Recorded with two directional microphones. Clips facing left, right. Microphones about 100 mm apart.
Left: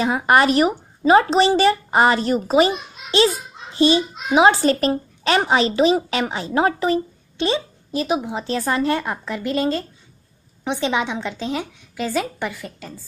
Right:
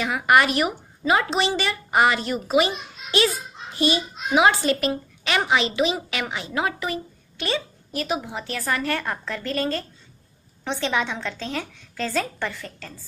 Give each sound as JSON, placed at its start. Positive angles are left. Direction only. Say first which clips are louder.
{"t": 0.0, "sound": "a child's voice", "louder": "left 3 dB", "side_deg": 30}